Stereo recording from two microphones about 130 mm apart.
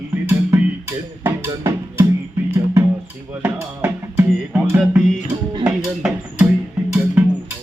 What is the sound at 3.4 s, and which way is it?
Music, 15° right (ahead or behind).